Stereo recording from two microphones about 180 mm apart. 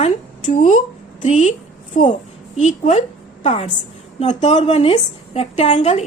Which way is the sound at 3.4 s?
35° left (ahead or behind).